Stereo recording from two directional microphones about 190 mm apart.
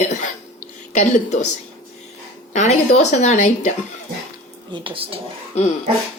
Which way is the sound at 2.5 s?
35° left (ahead or behind).